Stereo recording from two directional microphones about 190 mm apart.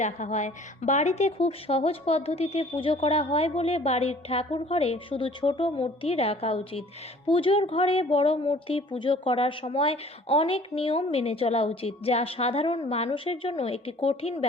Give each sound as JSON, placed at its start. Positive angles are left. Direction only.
{"t": 0.0, "sound": "speech", "side_deg": 35}